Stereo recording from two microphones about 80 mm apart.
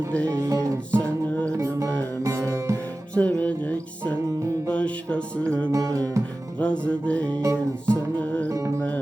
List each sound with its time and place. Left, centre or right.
0.1 s music: centre
0.3 s music: right
0.9 s music: centre
1.5 s music: right
3.2 s music: centre
5.7 s music: right
6.6 s music: centre
7.4 s music: right
8.2 s music: centre
8.4 s music: right